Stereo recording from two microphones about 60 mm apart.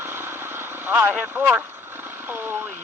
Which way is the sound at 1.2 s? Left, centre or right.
Right.